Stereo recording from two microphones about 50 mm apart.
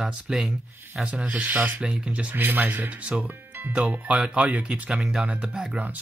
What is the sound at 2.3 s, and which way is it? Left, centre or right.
Speech, right.